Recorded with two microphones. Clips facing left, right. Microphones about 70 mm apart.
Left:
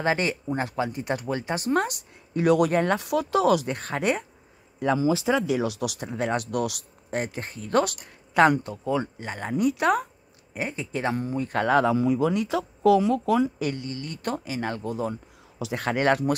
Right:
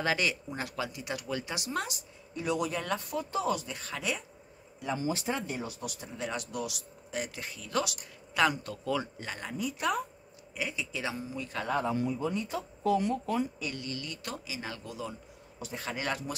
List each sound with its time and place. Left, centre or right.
0.0 s speech: left
3.0 s speech: left
3.7 s speech: left
5.5 s speech: left
7.3 s speech: left
8.6 s speech: left
9.5 s speech: left
10.5 s speech: left
11.6 s speech: left
13.7 s speech: left
14.0 s speech: left
15.6 s speech: left